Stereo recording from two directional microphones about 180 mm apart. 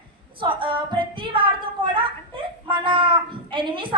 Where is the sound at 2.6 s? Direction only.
30° right (ahead or behind).